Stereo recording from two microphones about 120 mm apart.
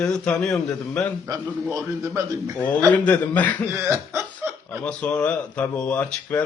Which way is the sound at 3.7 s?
20° right (ahead or behind).